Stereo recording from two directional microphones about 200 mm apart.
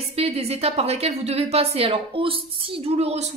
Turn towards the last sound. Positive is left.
turn(degrees=-30)  # may be behind; listen again after turning